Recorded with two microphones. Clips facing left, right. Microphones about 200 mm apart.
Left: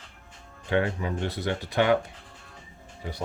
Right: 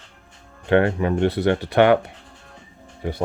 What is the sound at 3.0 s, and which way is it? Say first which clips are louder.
Speech: right 9 dB; 60° right (ahead or behind).